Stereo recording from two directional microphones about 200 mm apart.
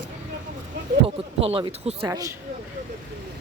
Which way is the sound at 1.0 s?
30° right (ahead or behind).